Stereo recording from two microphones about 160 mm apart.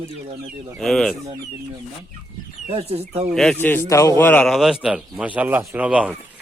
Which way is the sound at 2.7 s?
40° right (ahead or behind).